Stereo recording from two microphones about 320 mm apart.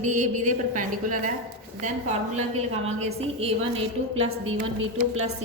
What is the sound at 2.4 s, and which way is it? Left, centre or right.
A woman's voice, right.